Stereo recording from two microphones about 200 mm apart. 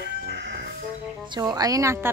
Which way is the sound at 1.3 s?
20° right (ahead or behind).